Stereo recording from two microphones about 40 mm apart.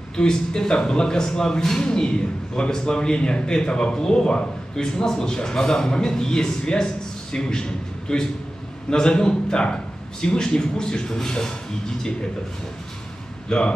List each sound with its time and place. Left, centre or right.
0.1 s a man's voice: centre
13.5 s a man's voice: left